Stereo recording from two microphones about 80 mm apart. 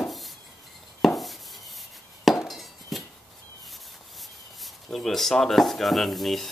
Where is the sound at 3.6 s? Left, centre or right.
Centre.